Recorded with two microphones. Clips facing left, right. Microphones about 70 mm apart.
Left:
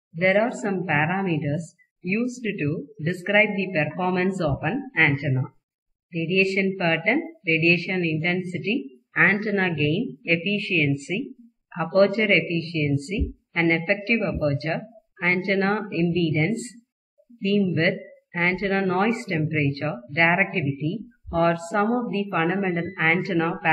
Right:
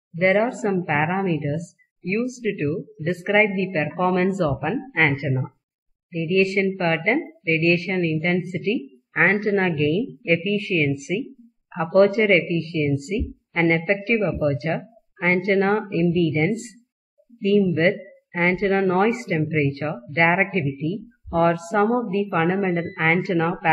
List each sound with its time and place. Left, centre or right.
0.1 s a woman's voice: centre
2.4 s speech: centre
2.7 s a woman's voice: centre
3.9 s speech: centre
4.2 s a woman's voice: centre
14.6 s speech: centre
19.7 s a woman's voice: centre
22.3 s speech: centre